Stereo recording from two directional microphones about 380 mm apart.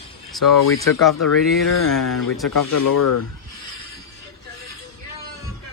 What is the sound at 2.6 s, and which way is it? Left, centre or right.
Speech, left.